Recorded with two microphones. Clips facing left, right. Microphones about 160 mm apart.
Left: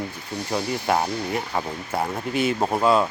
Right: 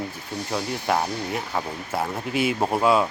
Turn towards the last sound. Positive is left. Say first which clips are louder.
# even
turn(degrees=-5)  # may be behind; listen again after turning